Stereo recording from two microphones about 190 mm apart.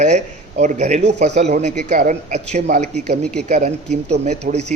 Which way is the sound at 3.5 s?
40° right (ahead or behind).